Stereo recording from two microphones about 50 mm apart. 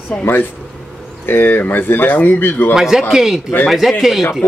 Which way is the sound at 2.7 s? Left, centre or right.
Centre.